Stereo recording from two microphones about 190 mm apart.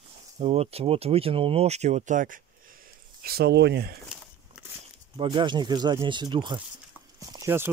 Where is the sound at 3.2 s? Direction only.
55° right (ahead or behind).